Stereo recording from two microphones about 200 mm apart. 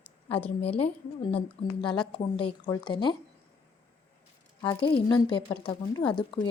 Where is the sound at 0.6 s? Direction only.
30° left (ahead or behind).